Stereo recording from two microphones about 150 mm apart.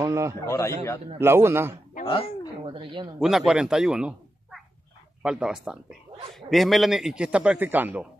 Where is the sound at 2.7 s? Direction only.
35° right (ahead or behind).